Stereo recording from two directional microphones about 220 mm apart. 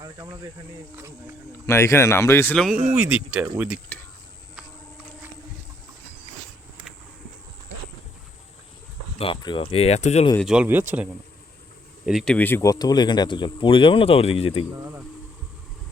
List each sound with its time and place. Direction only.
1.6 s speech: 10° left (ahead or behind)
2.9 s speech: 5° right (ahead or behind)
3.9 s speech: 10° left (ahead or behind)
9.1 s speech: 25° left (ahead or behind)
10.4 s speech: 5° right (ahead or behind); by 14.6 s 25° left (ahead or behind)